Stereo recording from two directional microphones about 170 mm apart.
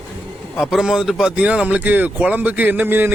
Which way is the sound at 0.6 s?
Centre (ahead or behind).